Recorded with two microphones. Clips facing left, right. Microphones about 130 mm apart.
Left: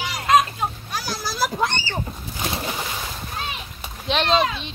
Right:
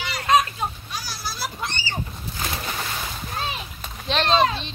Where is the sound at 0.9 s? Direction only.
90° left.